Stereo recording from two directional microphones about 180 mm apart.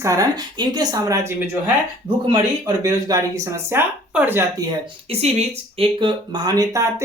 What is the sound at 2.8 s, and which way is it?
Speech, 20° right (ahead or behind).